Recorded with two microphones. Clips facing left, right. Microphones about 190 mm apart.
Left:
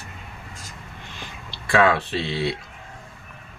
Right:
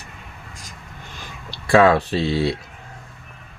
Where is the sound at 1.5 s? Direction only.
40° right (ahead or behind).